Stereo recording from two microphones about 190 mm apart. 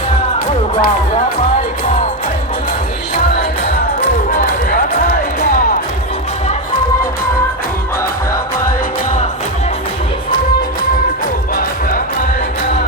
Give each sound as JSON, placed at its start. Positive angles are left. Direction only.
{"t": 0.3, "sound": "music", "side_deg": 50}